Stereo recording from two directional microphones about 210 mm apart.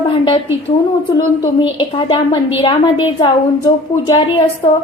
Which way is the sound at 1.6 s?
25° left (ahead or behind).